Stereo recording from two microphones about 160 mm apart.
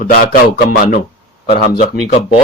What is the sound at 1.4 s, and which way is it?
Speech, 90° left.